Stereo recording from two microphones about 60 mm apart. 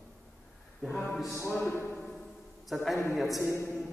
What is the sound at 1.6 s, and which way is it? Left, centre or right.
Speech, left.